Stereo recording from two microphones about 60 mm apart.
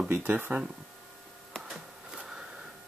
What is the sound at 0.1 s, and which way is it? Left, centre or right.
Speech, right.